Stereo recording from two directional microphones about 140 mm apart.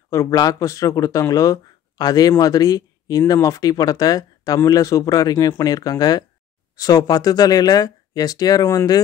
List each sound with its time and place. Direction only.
0.1 s speech: 25° left (ahead or behind)